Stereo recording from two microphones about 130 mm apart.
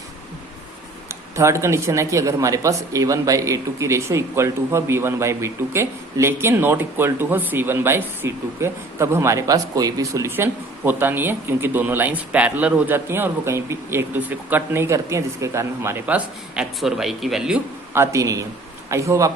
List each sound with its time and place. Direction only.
1.0 s speech: 20° right (ahead or behind); by 17.6 s 5° right (ahead or behind)
17.9 s speech: 20° right (ahead or behind)